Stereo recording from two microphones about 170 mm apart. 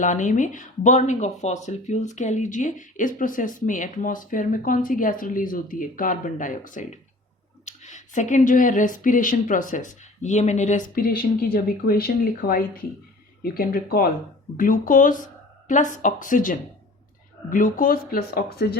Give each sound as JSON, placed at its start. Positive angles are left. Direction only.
{"t": 0.0, "sound": "speech", "side_deg": 45}